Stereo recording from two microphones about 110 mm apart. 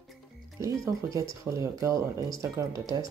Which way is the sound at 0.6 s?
30° right (ahead or behind).